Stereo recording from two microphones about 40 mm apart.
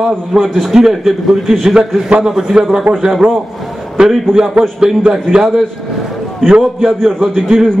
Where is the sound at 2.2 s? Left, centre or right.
Centre.